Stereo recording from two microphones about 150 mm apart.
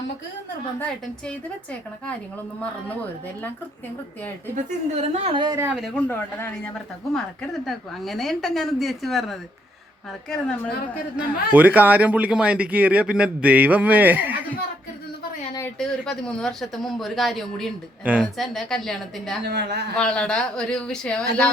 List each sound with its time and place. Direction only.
0.8 s a woman's voice: 5° left (ahead or behind)
4.5 s a woman's voice: 45° right (ahead or behind)
5.7 s a woman's voice: 5° left (ahead or behind)
11.2 s speech: 10° right (ahead or behind)
15.8 s a woman's voice: 5° left (ahead or behind)
18.0 s speech: 10° right (ahead or behind)
18.3 s a woman's voice: centre (ahead or behind)
19.4 s a man's voice: 90° right
20.0 s a woman's voice: 5° left (ahead or behind)